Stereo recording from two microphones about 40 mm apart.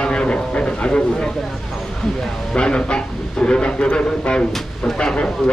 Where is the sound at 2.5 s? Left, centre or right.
Left.